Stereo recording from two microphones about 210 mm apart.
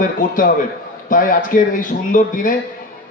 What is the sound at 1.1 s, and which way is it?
A man's voice, 40° left (ahead or behind).